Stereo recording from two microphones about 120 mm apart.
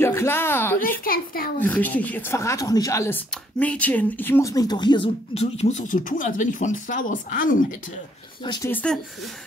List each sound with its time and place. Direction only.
0.0 s a sound: 20° left (ahead or behind)
1.6 s a woman's voice: 15° left (ahead or behind)
3.5 s a woman's voice: 10° left (ahead or behind); by 5.1 s 40° left (ahead or behind)
5.3 s speech: 60° left (ahead or behind); by 7.6 s 90° left
8.6 s speech: 15° left (ahead or behind)